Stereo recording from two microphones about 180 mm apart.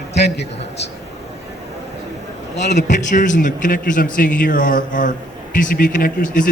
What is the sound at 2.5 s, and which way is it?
Speech, 75° left (ahead or behind).